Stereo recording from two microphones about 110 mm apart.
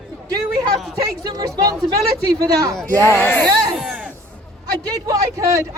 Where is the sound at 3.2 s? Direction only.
15° left (ahead or behind).